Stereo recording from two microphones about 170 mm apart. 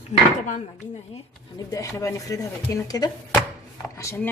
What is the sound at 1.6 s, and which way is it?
Speech, 20° left (ahead or behind).